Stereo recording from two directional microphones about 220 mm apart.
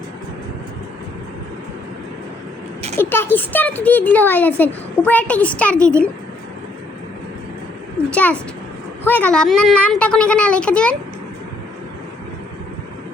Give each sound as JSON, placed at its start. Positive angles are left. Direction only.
{"t": 3.0, "sound": "a child's voice", "side_deg": 10}
{"t": 8.1, "sound": "speech", "side_deg": 5}